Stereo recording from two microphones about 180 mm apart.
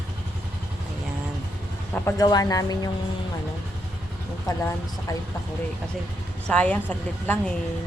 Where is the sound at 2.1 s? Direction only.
20° left (ahead or behind).